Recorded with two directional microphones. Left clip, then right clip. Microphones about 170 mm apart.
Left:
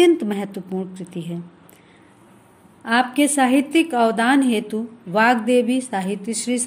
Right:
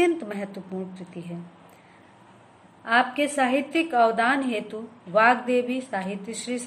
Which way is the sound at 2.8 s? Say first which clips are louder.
Left 3 dB; 60° left (ahead or behind).